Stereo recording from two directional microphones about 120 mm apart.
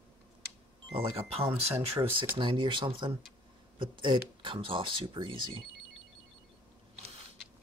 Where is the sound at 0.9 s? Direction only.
50° right (ahead or behind).